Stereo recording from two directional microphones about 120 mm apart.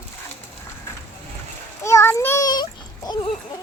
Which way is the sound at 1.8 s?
20° left (ahead or behind).